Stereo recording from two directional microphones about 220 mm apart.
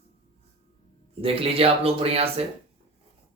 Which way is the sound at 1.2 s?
25° right (ahead or behind).